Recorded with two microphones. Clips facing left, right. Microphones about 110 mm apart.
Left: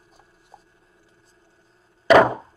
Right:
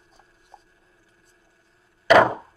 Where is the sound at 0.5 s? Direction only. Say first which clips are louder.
Even; 15° left (ahead or behind).